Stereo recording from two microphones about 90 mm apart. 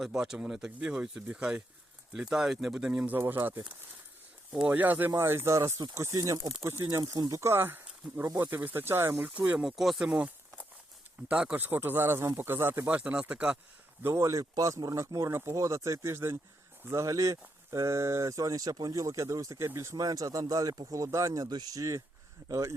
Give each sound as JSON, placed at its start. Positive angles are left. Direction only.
{"t": 0.0, "sound": "speech", "side_deg": -5}
{"t": 3.2, "sound": "speech", "side_deg": -25}
{"t": 7.0, "sound": "speech", "side_deg": -45}
{"t": 9.6, "sound": "speech", "side_deg": -5}
{"t": 10.1, "sound": "a sound", "side_deg": -15}
{"t": 11.3, "sound": "speech", "side_deg": -10}
{"t": 14.0, "sound": "speech", "side_deg": -30}